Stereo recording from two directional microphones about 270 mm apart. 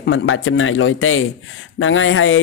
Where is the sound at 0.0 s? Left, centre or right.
Left.